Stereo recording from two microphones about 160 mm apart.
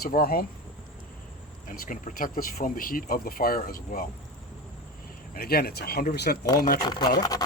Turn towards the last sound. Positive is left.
turn(degrees=25)  # may be behind; listen again after turning